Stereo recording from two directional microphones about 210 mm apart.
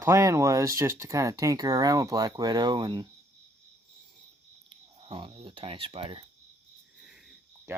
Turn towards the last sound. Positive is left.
turn(degrees=-5)  # may be behind; listen again after turning